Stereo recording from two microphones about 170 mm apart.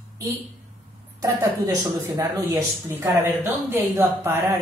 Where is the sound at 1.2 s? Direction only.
20° right (ahead or behind).